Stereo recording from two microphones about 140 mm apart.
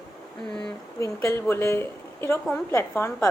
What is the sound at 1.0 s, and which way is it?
A woman's voice, 20° left (ahead or behind).